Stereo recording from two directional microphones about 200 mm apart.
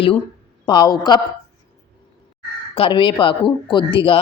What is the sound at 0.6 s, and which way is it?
Speech, 20° left (ahead or behind).